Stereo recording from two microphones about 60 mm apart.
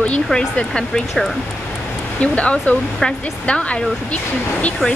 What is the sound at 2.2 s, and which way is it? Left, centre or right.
Speech, left.